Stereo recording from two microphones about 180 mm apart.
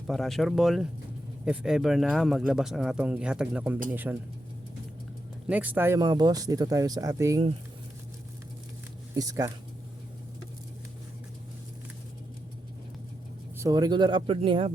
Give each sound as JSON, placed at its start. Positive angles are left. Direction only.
{"t": 0.1, "sound": "a man's voice", "side_deg": 0}
{"t": 5.5, "sound": "speech", "side_deg": -10}
{"t": 9.1, "sound": "a man's voice", "side_deg": -20}
{"t": 13.6, "sound": "speech", "side_deg": -20}